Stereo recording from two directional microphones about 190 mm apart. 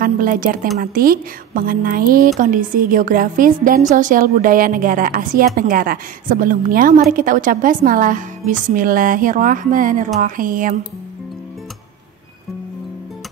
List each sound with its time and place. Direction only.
0.0 s a woman's voice: 50° right (ahead or behind)